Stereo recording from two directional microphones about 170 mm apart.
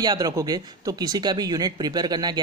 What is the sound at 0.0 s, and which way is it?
A woman's voice, 20° right (ahead or behind).